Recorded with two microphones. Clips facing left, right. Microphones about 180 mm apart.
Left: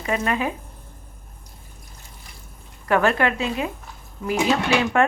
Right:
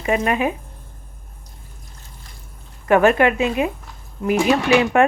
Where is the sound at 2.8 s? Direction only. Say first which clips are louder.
Right 5 dB; 15° right (ahead or behind).